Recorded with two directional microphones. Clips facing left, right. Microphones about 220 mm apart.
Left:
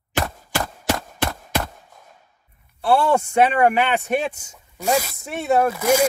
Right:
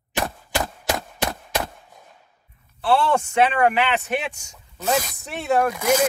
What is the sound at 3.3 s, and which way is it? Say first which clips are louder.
Speech: left 2 dB; 45° left (ahead or behind).